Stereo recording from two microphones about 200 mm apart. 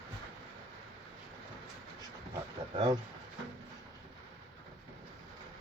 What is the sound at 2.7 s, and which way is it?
Speech, 20° right (ahead or behind).